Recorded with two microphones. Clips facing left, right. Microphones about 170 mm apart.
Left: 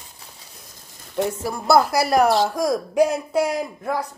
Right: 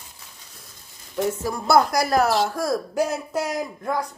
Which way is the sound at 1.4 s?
5° left (ahead or behind).